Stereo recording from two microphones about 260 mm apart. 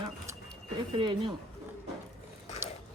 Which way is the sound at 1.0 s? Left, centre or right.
Centre.